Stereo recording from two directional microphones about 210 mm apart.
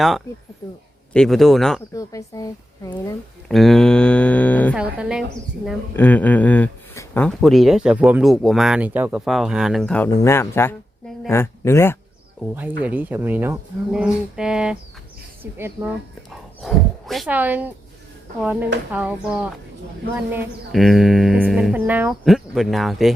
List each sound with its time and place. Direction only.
1.1 s speech: centre (ahead or behind)
1.9 s speech: 15° left (ahead or behind)
3.5 s speech: centre (ahead or behind)
4.7 s speech: 5° right (ahead or behind)
6.0 s speech: 10° left (ahead or behind)
12.4 s speech: 5° right (ahead or behind)
16.6 s speech: centre (ahead or behind)
18.9 s speech: 5° right (ahead or behind)